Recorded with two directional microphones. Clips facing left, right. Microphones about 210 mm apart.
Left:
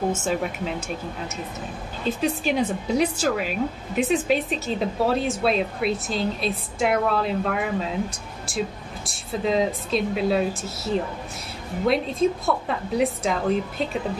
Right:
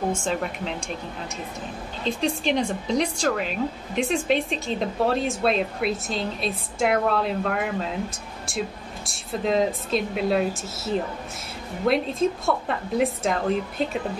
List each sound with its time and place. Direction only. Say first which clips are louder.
0.1 s speech: left 1 dB; 5° left (ahead or behind)